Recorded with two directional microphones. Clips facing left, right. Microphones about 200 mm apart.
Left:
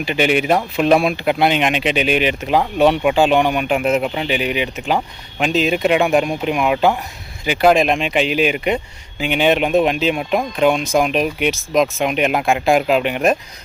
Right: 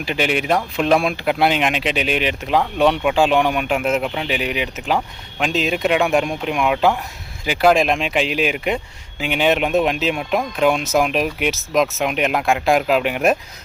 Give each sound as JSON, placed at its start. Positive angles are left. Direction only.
{"t": 0.0, "sound": "speech", "side_deg": 0}